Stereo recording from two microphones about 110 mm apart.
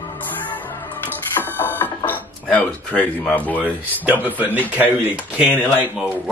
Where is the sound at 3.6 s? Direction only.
15° right (ahead or behind).